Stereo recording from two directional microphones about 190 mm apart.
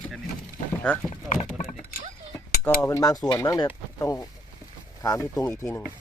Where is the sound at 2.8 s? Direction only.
20° left (ahead or behind).